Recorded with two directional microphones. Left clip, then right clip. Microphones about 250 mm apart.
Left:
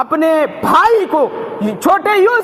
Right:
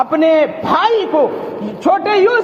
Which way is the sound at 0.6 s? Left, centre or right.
Left.